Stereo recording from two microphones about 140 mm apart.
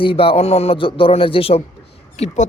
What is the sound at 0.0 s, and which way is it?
Speech, 40° left (ahead or behind).